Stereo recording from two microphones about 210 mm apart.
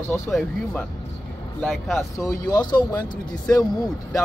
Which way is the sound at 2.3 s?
20° left (ahead or behind).